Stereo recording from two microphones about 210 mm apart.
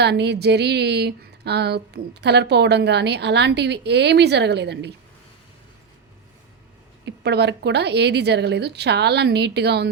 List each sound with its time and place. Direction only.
0.0 s a woman's voice: 55° right (ahead or behind)
7.0 s a woman's voice: 50° right (ahead or behind)